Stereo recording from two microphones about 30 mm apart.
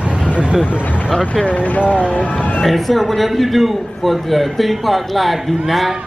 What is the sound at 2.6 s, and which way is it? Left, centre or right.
A man's voice, centre.